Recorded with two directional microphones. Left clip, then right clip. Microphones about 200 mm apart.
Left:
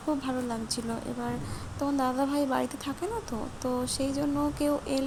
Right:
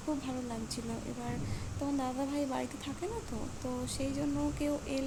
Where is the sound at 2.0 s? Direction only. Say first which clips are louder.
Left 9 dB; 20° left (ahead or behind).